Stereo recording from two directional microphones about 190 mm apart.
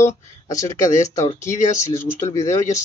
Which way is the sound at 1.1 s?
20° left (ahead or behind).